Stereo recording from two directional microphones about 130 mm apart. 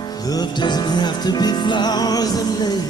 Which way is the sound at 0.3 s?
35° left (ahead or behind).